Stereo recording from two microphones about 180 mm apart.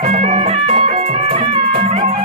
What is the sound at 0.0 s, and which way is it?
Music, 40° right (ahead or behind).